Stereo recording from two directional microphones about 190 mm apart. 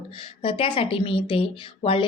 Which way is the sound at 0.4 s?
30° left (ahead or behind).